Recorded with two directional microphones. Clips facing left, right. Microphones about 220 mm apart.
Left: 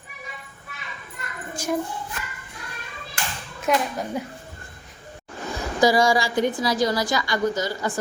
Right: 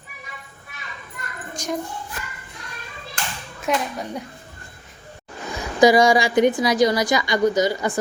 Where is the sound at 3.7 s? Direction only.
Centre (ahead or behind).